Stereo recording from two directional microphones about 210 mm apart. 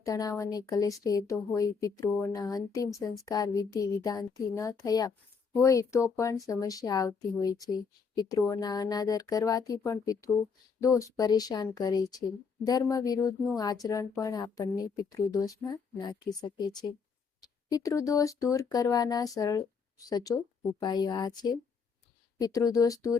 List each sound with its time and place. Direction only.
0.0 s speech: 15° left (ahead or behind)